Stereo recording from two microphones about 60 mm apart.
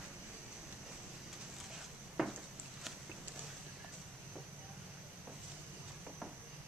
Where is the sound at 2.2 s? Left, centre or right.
Centre.